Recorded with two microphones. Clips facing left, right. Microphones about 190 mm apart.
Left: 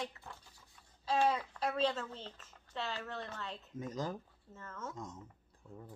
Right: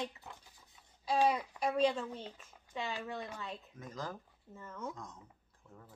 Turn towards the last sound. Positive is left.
turn(degrees=10)  # may be behind; listen again after turning